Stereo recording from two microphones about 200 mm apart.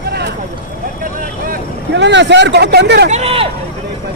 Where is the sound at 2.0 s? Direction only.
60° right (ahead or behind).